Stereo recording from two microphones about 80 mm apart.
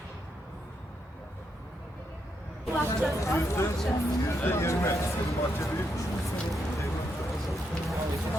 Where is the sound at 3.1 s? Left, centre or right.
Left.